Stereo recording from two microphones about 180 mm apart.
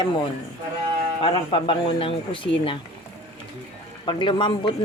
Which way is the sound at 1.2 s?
25° left (ahead or behind).